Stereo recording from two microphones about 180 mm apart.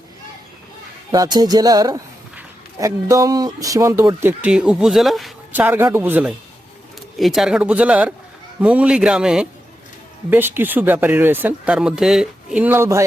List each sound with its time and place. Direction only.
1.1 s music: 20° right (ahead or behind)
2.3 s a man's voice: 15° right (ahead or behind)